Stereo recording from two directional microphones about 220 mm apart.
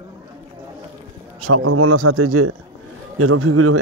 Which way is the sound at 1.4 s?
75° right (ahead or behind).